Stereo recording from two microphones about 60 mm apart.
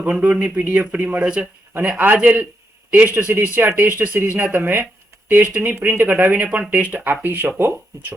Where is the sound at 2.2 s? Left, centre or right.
Right.